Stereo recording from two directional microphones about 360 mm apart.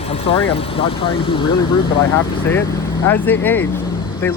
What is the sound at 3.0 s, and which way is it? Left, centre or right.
Speech, centre.